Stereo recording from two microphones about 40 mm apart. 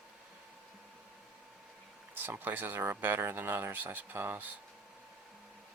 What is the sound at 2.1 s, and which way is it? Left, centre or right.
Speech, right.